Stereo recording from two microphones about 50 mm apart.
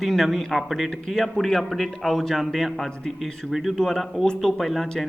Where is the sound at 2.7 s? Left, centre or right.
Centre.